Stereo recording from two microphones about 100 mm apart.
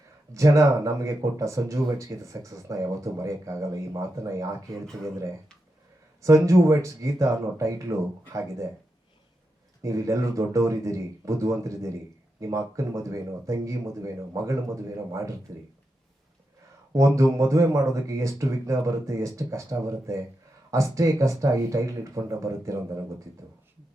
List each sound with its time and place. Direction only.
0.3 s speech: 30° right (ahead or behind)
6.2 s speech: 30° right (ahead or behind)
9.8 s speech: 30° right (ahead or behind)
17.2 s speech: 30° right (ahead or behind)